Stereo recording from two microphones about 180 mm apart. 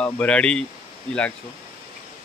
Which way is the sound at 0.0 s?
5° left (ahead or behind).